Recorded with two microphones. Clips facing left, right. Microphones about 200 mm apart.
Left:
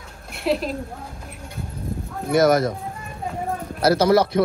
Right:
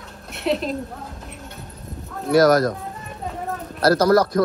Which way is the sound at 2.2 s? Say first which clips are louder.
Right 2 dB; 5° left (ahead or behind).